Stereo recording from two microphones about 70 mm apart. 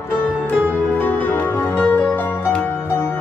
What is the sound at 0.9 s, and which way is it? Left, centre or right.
Music, left.